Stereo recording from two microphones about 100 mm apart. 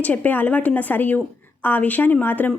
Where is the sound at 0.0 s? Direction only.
15° left (ahead or behind).